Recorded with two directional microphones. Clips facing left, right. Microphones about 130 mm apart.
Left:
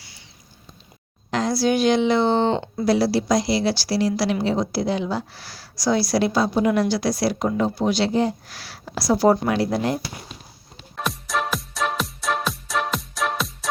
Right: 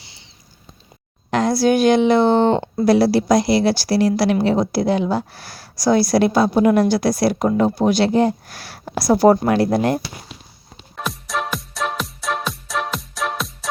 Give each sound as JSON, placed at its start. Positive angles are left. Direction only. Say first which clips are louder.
{"t": 1.3, "sound": "a woman's voice", "louder": "right 4 dB", "side_deg": -55}
{"t": 10.9, "sound": "music", "louder": "even", "side_deg": 0}